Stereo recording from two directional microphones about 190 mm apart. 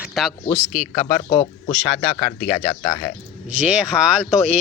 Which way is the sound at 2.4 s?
40° left (ahead or behind).